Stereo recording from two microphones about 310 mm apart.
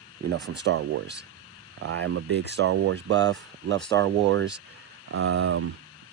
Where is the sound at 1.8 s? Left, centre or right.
Right.